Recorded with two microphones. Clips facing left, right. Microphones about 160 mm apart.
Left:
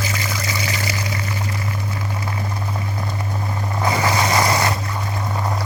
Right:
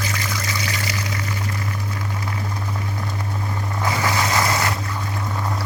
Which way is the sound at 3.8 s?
15° left (ahead or behind).